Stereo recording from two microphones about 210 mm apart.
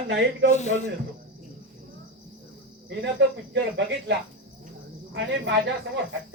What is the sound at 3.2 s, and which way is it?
A man's voice, 55° right (ahead or behind).